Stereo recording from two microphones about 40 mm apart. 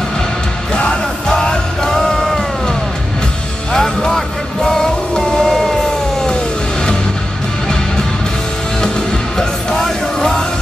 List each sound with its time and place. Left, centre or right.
0.7 s music: left; by 5.8 s centre
9.4 s music: centre